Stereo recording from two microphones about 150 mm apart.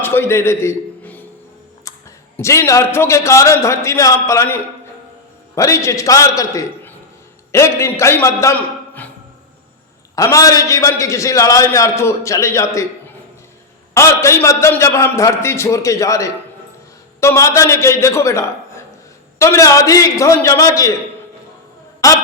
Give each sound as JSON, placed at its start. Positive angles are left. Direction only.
{"t": 0.0, "sound": "a sound", "side_deg": 15}
{"t": 2.3, "sound": "a man's voice", "side_deg": 15}
{"t": 10.2, "sound": "a man's voice", "side_deg": 20}
{"t": 22.0, "sound": "a man's voice", "side_deg": 25}